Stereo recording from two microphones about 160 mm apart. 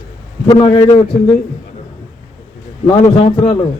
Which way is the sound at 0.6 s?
40° left (ahead or behind).